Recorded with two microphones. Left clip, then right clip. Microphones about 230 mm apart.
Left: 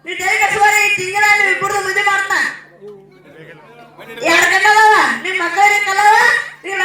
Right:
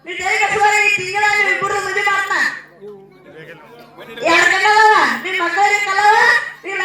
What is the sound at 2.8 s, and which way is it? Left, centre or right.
Music, centre.